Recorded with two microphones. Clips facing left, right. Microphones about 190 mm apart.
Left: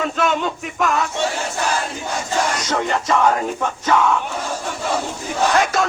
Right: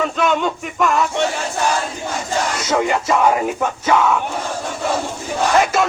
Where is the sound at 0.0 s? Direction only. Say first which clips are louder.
Right 2 dB; centre (ahead or behind).